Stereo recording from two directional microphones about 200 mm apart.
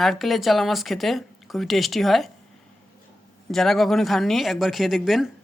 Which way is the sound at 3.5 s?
Centre (ahead or behind).